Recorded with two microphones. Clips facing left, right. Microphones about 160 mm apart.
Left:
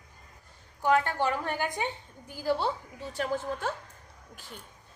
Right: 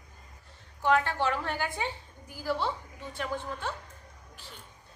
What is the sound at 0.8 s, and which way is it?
Speech, 15° left (ahead or behind).